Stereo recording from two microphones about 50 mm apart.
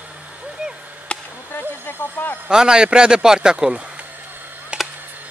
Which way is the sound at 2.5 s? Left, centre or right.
Centre.